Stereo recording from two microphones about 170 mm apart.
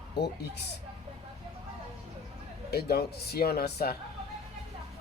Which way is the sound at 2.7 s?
70° left (ahead or behind).